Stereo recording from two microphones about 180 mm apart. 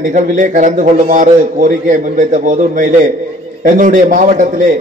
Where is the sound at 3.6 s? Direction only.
45° right (ahead or behind).